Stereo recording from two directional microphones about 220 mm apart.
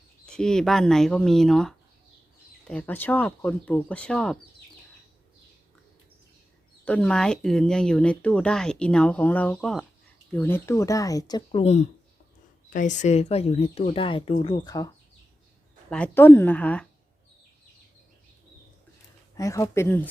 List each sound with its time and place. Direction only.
0.3 s speech: 5° left (ahead or behind)
6.8 s speech: 5° left (ahead or behind)
15.9 s speech: 5° left (ahead or behind)
19.4 s speech: 15° left (ahead or behind)